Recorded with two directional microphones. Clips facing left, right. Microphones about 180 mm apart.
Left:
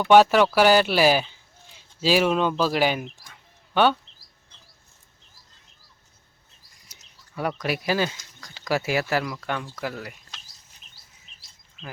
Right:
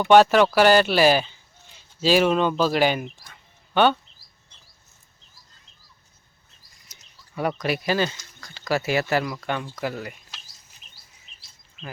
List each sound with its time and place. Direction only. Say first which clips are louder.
0.1 s speech: right 1 dB; 10° left (ahead or behind)
7.4 s speech: right 2 dB; 5° left (ahead or behind)